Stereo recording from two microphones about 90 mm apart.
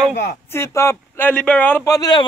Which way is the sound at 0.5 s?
30° left (ahead or behind).